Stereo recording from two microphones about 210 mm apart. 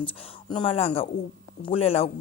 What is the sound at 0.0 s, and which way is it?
Speech, 25° left (ahead or behind).